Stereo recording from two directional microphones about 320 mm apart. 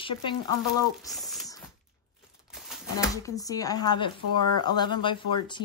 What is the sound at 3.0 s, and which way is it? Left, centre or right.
Speech, centre.